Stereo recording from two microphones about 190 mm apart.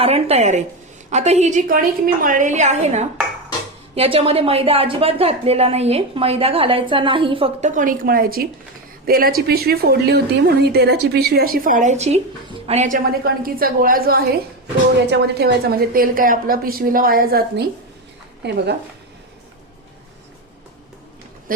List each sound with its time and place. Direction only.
0.0 s a woman's voice: 35° right (ahead or behind)
7.7 s a woman's voice: 45° right (ahead or behind)
15.0 s speech: 60° right (ahead or behind)
16.0 s a woman's voice: 45° right (ahead or behind)
18.4 s speech: 60° right (ahead or behind)